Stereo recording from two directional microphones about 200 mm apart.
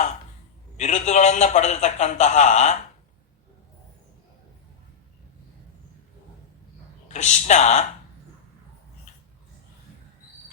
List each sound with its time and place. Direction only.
0.8 s a man's voice: 35° left (ahead or behind)
7.1 s a man's voice: 35° left (ahead or behind)
9.1 s a sound: 35° left (ahead or behind)